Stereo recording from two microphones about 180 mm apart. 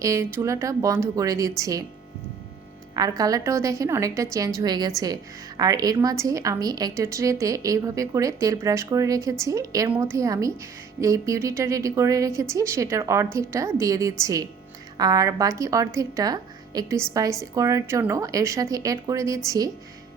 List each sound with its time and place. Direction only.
0.0 s a woman's voice: 15° right (ahead or behind)
2.9 s a woman's voice: 20° right (ahead or behind)